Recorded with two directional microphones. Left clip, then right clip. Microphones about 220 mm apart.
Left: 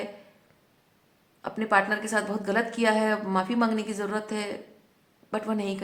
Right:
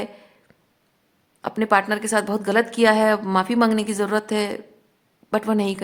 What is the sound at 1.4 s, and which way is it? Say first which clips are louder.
A woman's voice: right 5 dB; 45° right (ahead or behind).